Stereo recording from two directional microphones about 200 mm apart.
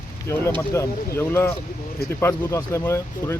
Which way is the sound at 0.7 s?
15° left (ahead or behind).